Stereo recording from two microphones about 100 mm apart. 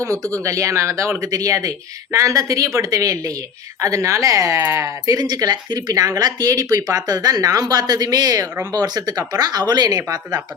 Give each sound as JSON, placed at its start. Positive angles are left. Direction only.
{"t": 0.0, "sound": "speech", "side_deg": -35}